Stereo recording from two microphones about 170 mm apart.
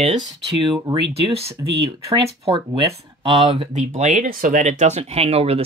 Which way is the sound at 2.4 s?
35° right (ahead or behind).